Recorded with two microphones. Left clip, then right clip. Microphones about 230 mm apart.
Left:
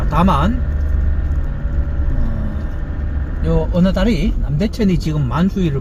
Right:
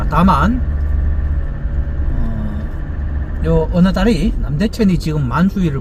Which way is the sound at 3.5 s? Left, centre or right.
Centre.